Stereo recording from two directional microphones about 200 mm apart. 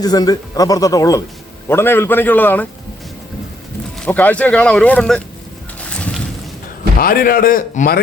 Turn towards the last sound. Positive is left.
turn(degrees=45)  # may be behind; listen again after turning